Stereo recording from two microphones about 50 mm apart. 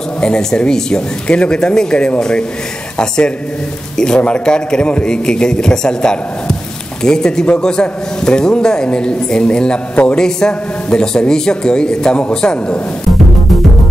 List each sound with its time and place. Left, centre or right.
0.2 s a man's voice: centre
3.9 s a man's voice: centre